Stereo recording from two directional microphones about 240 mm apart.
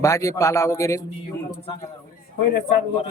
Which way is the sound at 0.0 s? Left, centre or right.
Centre.